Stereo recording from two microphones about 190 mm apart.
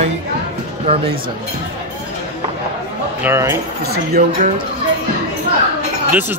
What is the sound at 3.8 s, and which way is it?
Speech, 55° right (ahead or behind).